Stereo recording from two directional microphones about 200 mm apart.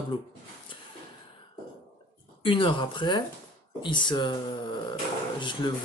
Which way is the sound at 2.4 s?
25° left (ahead or behind).